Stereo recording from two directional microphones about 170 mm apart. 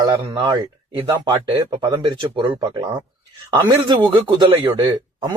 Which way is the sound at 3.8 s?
30° right (ahead or behind).